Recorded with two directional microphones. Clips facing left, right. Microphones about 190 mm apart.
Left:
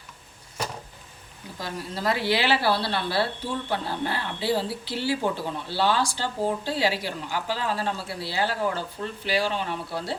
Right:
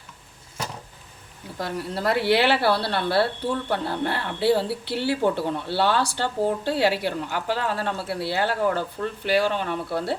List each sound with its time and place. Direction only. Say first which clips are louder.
1.5 s speech: right 4 dB; 60° right (ahead or behind)